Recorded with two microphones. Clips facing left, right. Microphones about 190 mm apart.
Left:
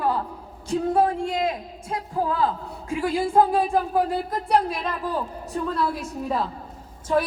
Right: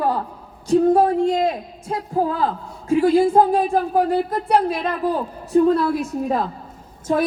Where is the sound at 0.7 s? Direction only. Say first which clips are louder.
Right 6 dB; 40° right (ahead or behind).